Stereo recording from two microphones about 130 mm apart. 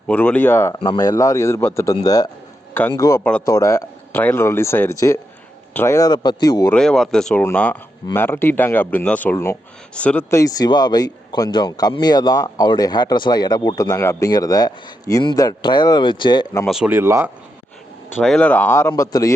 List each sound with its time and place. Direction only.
0.1 s speech: 10° left (ahead or behind)
0.8 s speech: 30° left (ahead or behind)
6.1 s speech: 30° left (ahead or behind)
6.7 s speech: 5° left (ahead or behind); by 9.6 s 20° left (ahead or behind)
9.9 s speech: 10° left (ahead or behind)
10.2 s speech: 25° left (ahead or behind)
16.6 s speech: 5° right (ahead or behind)
16.9 s speech: 20° right (ahead or behind)
18.2 s speech: 5° left (ahead or behind); by 19.3 s 25° left (ahead or behind)